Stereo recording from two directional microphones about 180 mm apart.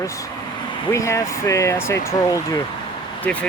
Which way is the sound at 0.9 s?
15° left (ahead or behind).